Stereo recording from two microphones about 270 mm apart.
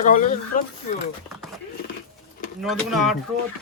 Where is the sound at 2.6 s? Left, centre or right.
Centre.